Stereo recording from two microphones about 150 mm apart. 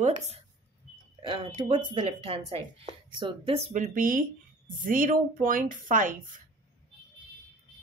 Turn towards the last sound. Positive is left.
turn(degrees=-65)  # may be behind; listen again after turning